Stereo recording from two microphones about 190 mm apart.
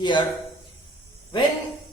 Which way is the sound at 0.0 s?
25° left (ahead or behind).